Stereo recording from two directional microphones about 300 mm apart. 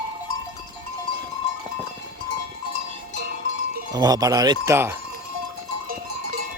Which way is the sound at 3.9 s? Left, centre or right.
Centre.